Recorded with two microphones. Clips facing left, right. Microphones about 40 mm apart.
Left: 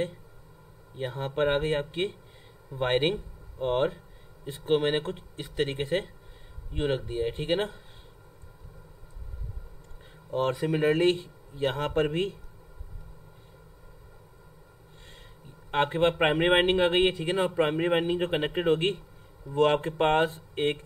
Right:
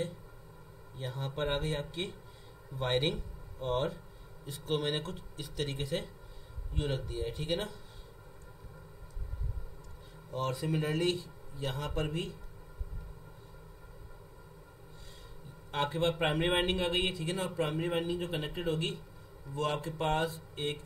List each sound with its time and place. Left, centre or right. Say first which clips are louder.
0.9 s speech: left 8 dB; left
10.3 s speech: left 7 dB; left
15.7 s speech: left 7 dB; left